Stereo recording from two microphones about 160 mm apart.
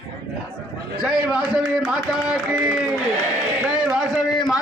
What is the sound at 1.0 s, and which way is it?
A man's voice, 5° right (ahead or behind).